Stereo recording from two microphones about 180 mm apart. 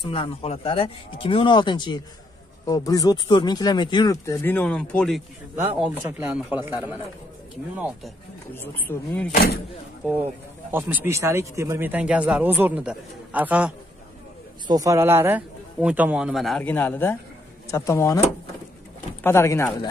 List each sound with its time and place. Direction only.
0.0 s speech: 30° left (ahead or behind); by 5.2 s 5° left (ahead or behind)
5.8 s a man's voice: 5° right (ahead or behind)
8.5 s speech: 10° left (ahead or behind)
9.3 s speech: 60° left (ahead or behind)
10.7 s a man's voice: 10° right (ahead or behind)
14.7 s a man's voice: 20° right (ahead or behind); by 18.2 s 15° left (ahead or behind)
19.2 s speech: 15° left (ahead or behind)